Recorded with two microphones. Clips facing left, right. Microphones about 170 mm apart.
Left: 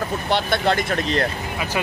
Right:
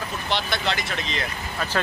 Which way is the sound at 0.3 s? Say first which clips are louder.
Left 6 dB; 55° left (ahead or behind).